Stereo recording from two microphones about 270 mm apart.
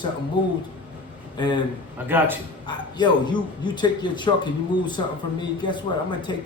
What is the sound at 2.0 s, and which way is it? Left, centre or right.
Speech, centre.